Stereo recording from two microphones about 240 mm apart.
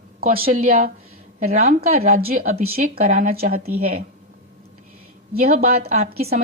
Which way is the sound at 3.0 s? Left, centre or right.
Right.